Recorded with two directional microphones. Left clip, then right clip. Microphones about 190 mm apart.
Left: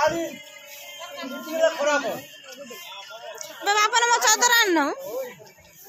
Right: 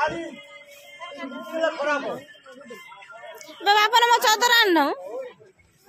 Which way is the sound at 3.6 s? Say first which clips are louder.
Right 3 dB; 25° right (ahead or behind).